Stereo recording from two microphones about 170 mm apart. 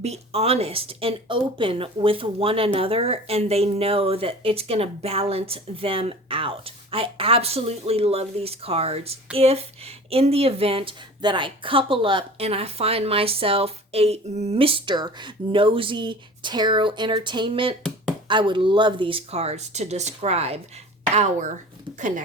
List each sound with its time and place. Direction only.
0.0 s speech: 35° right (ahead or behind)